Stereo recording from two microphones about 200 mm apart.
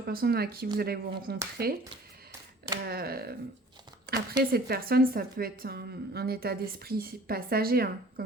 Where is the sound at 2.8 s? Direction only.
50° right (ahead or behind).